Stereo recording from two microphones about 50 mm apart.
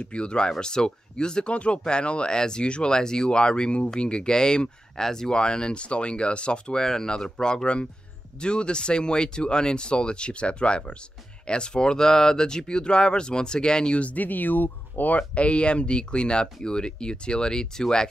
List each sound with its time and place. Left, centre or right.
0.0 s speech: left